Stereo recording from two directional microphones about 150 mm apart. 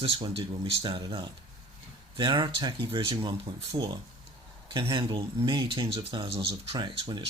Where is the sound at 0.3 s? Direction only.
40° right (ahead or behind).